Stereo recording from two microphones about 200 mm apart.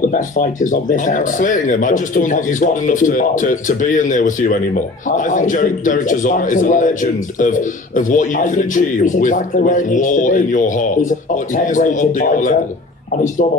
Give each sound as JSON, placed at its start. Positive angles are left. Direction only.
{"t": 0.1, "sound": "speech", "side_deg": 40}